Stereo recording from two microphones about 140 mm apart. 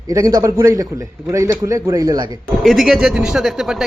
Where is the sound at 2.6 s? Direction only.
Centre (ahead or behind).